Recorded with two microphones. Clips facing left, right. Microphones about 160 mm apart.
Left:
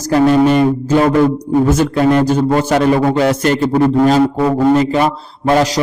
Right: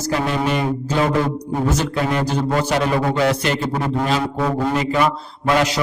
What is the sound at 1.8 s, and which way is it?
A man's voice, 45° left (ahead or behind).